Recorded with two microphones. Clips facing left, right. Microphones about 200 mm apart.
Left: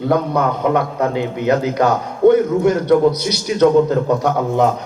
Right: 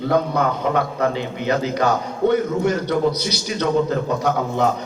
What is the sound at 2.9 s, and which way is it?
A man's voice, 50° left (ahead or behind).